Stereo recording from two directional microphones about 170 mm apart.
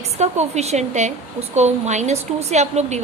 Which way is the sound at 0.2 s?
40° right (ahead or behind).